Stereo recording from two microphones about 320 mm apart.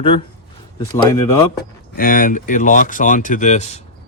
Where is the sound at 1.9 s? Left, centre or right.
Left.